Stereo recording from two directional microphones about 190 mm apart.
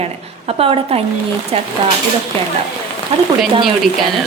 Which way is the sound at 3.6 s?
Centre (ahead or behind).